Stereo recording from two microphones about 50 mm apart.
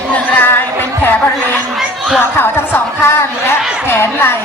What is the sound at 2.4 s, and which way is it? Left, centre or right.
A woman's voice, left.